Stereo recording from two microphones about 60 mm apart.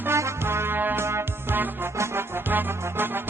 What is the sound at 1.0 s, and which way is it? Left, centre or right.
Music, right.